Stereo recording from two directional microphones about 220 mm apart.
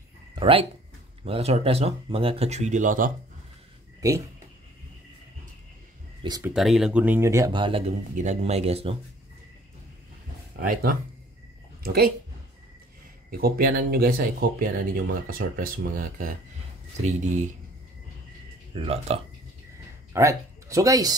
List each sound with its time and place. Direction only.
0.4 s speech: 25° right (ahead or behind)
4.0 s speech: 15° right (ahead or behind)
6.2 s speech: 15° right (ahead or behind)
6.5 s speech: centre (ahead or behind); by 7.8 s 20° right (ahead or behind)
8.1 s speech: 35° right (ahead or behind)
10.5 s speech: 40° right (ahead or behind)
13.3 s speech: 45° right (ahead or behind)
18.7 s speech: 25° right (ahead or behind)
20.1 s speech: 15° right (ahead or behind)